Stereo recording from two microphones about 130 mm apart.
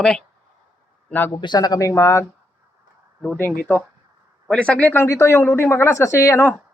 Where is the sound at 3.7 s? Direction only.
15° left (ahead or behind).